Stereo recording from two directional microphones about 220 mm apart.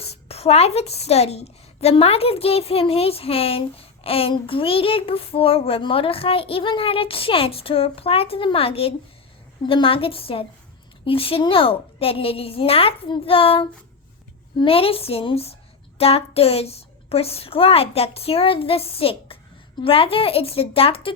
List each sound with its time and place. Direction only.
0.0 s child singing: 25° left (ahead or behind)